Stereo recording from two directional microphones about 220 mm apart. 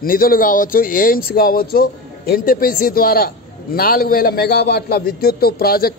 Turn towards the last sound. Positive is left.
turn(degrees=45)  # may be behind; listen again after turning